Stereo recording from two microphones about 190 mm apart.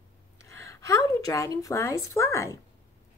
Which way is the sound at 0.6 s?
15° left (ahead or behind).